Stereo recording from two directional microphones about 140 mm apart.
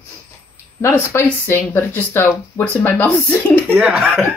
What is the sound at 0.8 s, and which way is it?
Speech, 15° left (ahead or behind).